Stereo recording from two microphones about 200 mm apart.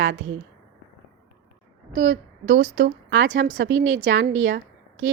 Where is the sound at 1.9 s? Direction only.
60° right (ahead or behind).